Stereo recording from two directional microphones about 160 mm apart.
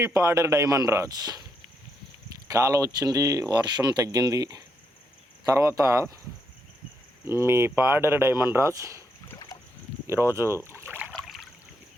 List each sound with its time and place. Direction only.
0.0 s speech: 20° right (ahead or behind)
2.5 s speech: 20° right (ahead or behind)
7.3 s speech: 15° right (ahead or behind)
9.5 s boat: 25° left (ahead or behind)
10.1 s speech: 15° right (ahead or behind)
11.1 s a sound: centre (ahead or behind)